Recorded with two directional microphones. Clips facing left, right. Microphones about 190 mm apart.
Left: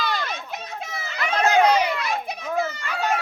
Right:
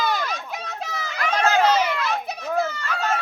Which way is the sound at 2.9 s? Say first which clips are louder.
Left 1 dB; 15° left (ahead or behind).